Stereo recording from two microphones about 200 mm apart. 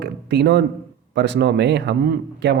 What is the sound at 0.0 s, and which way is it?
A man's voice, 55° right (ahead or behind).